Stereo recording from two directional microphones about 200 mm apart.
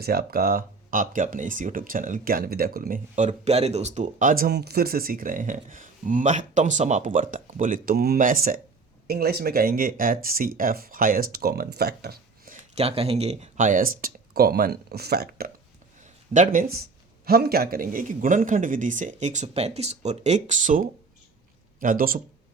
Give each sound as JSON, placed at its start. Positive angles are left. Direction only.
{"t": 0.0, "sound": "speech", "side_deg": -50}
{"t": 12.7, "sound": "speech", "side_deg": -30}
{"t": 16.0, "sound": "speech", "side_deg": -40}